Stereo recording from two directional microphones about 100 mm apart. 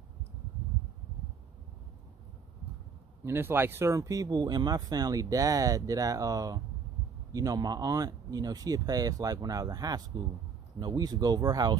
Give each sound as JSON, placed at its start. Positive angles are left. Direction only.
{"t": 3.3, "sound": "speech", "side_deg": -20}